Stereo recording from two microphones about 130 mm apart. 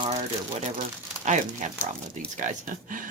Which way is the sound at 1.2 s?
70° right (ahead or behind).